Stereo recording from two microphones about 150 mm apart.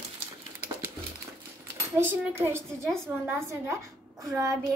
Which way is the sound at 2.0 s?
15° right (ahead or behind).